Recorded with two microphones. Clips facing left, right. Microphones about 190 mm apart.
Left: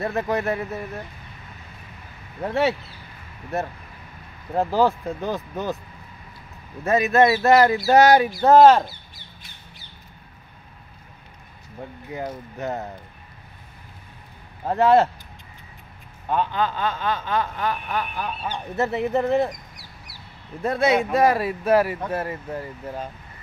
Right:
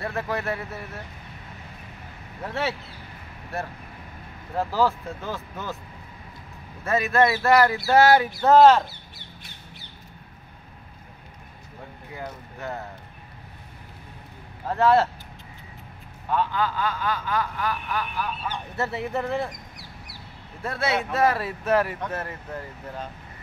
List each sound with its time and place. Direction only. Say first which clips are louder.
0.0 s speech: left 5 dB; 20° left (ahead or behind)
2.4 s speech: left 7 dB; 15° left (ahead or behind)
6.8 s speech: left 4 dB; 15° left (ahead or behind)
12.1 s speech: left 6 dB; 20° left (ahead or behind)
14.7 s speech: left 3 dB; 15° left (ahead or behind)
16.3 s speech: left 2 dB; 20° left (ahead or behind)
20.6 s speech: left 6 dB; 20° left (ahead or behind)